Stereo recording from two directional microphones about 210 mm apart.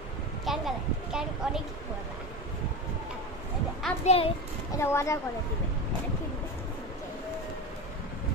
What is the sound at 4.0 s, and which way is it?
Speech, 30° left (ahead or behind).